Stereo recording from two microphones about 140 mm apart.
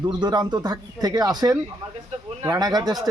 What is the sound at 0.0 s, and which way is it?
Speech, 30° right (ahead or behind).